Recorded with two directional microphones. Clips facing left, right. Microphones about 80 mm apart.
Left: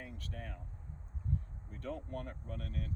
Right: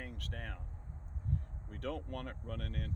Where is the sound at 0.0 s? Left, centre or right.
Right.